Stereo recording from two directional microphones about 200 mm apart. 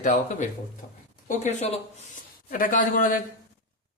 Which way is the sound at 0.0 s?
40° left (ahead or behind).